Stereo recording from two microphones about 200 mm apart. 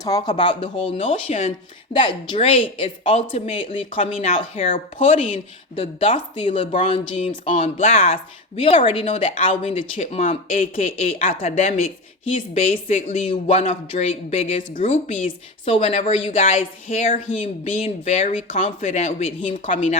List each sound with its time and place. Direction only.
0.0 s speech: 20° left (ahead or behind)